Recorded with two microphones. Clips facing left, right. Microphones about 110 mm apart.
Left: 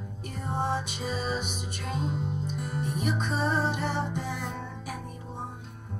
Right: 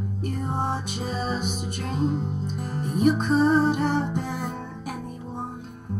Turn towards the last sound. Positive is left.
turn(degrees=-45)  # may be behind; listen again after turning